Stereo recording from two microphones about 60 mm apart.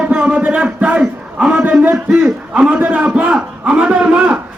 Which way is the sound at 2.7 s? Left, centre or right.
Right.